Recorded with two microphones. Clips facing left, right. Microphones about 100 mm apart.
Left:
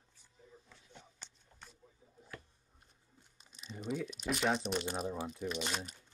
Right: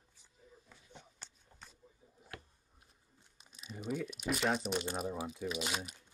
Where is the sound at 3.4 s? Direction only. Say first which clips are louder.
Even; 5° right (ahead or behind).